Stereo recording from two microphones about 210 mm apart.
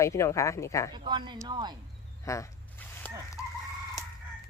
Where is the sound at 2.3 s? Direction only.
15° left (ahead or behind).